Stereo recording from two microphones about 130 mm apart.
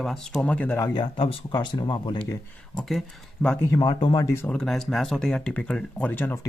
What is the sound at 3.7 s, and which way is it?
Speech, 35° left (ahead or behind).